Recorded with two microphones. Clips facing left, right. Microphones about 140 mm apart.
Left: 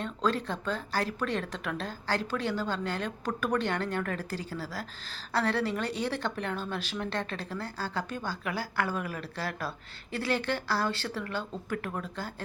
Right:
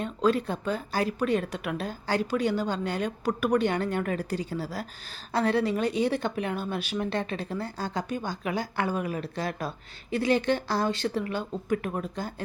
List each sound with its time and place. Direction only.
0.0 s speech: 15° right (ahead or behind)